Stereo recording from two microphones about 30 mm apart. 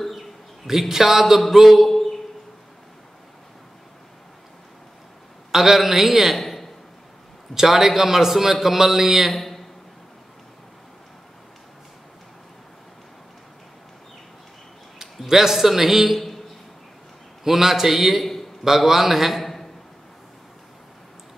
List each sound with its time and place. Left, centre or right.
0.7 s a man's voice: centre
1.9 s a sound: centre
5.5 s a man's voice: centre
6.3 s a sound: centre
7.6 s a man's voice: centre
9.3 s a man's voice: centre
15.0 s a man's voice: centre
17.4 s a man's voice: centre